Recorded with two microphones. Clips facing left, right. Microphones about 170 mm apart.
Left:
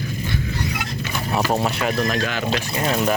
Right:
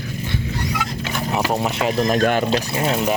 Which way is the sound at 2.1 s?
50° right (ahead or behind).